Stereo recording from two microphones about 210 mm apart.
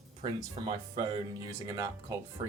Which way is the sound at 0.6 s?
20° right (ahead or behind).